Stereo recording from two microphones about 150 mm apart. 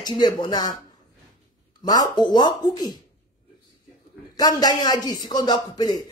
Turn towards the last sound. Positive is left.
turn(degrees=25)  # may be behind; listen again after turning